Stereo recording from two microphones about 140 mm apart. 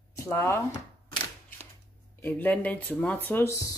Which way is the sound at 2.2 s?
15° left (ahead or behind).